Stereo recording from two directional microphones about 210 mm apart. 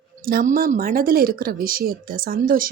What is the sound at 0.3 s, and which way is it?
A woman's voice, 45° right (ahead or behind).